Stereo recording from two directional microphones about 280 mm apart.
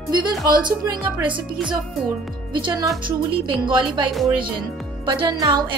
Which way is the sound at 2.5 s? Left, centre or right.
Centre.